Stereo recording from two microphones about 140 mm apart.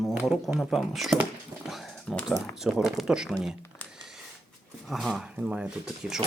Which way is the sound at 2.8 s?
5° right (ahead or behind).